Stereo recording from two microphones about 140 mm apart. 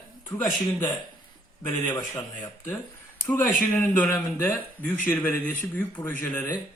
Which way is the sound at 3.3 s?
10° left (ahead or behind).